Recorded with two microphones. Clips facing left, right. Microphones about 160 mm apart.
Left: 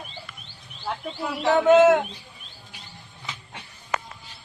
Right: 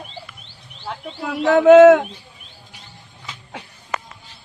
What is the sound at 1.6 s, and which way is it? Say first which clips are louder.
Speech: right 8 dB; 90° right.